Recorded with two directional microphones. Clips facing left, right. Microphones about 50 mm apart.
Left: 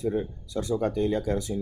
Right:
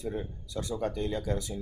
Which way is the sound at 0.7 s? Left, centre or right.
Left.